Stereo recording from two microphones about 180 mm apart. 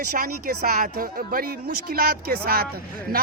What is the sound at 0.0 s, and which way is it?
A woman's voice, 45° right (ahead or behind).